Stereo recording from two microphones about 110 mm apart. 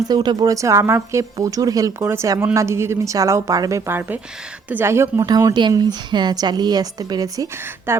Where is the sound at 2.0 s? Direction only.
20° right (ahead or behind).